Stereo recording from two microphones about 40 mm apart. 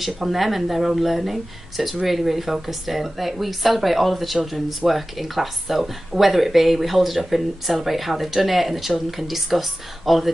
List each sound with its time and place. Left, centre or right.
0.0 s speech: centre